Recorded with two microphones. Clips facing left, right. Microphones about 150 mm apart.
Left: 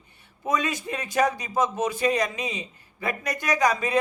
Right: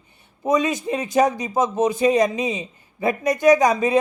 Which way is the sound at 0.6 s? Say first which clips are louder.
Right 7 dB; 20° right (ahead or behind).